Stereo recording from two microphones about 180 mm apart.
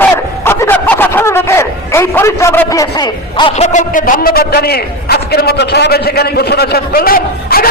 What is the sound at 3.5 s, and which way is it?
A man's voice, 40° left (ahead or behind).